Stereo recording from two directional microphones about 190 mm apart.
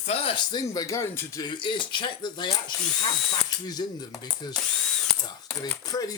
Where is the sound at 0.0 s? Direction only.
30° left (ahead or behind).